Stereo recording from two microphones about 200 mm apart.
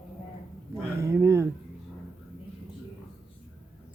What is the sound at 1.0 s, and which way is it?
Speech, 15° right (ahead or behind).